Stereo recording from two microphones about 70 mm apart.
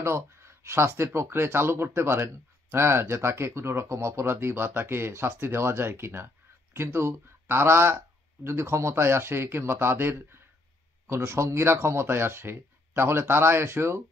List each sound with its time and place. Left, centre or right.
0.0 s speech: right